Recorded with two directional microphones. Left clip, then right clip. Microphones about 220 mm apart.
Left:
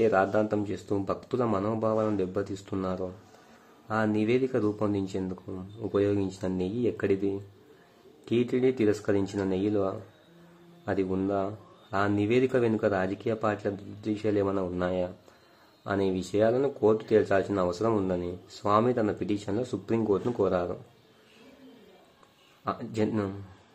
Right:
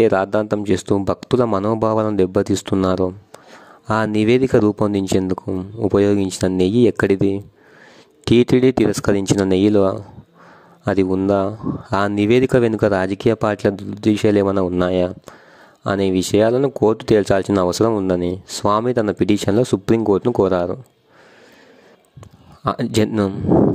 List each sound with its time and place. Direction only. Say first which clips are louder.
0.0 s speech: right 8 dB; 50° right (ahead or behind)
5.5 s speech: right 16 dB; 35° right (ahead or behind)
5.9 s speech: right 10 dB; 50° right (ahead or behind)
22.7 s speech: right 11 dB; 50° right (ahead or behind)